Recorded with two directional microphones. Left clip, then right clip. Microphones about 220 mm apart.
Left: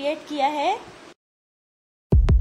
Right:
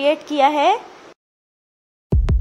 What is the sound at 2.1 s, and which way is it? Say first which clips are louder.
Music: even; centre (ahead or behind).